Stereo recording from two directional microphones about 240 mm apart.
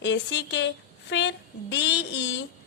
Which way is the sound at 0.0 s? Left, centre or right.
Left.